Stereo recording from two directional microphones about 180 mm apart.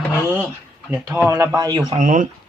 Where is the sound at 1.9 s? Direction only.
45° right (ahead or behind).